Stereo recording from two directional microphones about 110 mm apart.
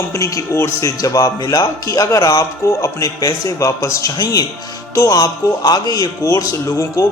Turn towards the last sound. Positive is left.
turn(degrees=30)  # may be behind; listen again after turning